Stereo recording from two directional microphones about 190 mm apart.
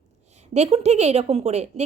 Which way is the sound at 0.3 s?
35° right (ahead or behind).